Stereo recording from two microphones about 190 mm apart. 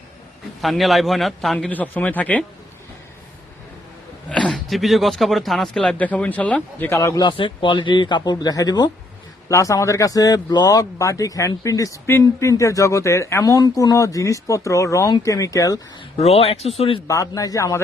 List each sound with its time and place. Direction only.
0.6 s a man's voice: centre (ahead or behind)
4.3 s speech: 5° left (ahead or behind)
16.1 s speech: 35° left (ahead or behind)
17.1 s speech: 15° left (ahead or behind)